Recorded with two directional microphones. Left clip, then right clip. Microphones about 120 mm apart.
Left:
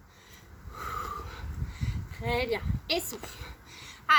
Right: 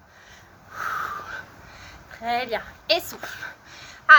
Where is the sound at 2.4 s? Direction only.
5° left (ahead or behind).